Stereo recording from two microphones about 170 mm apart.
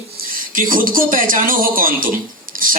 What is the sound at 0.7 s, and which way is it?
Speech, 55° right (ahead or behind).